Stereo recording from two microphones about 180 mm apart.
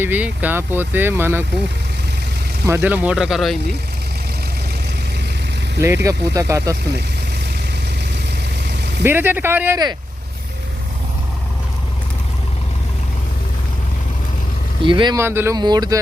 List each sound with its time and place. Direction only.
0.0 s speech: 10° right (ahead or behind)
2.6 s speech: 10° right (ahead or behind)
5.8 s speech: 15° right (ahead or behind)
9.0 s speech: 10° right (ahead or behind)
14.8 s speech: 25° right (ahead or behind)
15.2 s speech: 15° right (ahead or behind)